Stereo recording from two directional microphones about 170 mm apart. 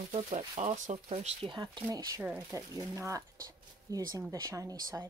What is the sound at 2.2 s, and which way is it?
Speech, 10° right (ahead or behind).